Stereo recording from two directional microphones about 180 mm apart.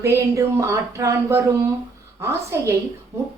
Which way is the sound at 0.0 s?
15° right (ahead or behind).